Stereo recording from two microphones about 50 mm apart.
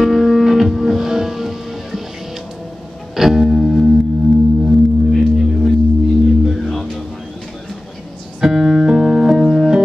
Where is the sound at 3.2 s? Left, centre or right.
Centre.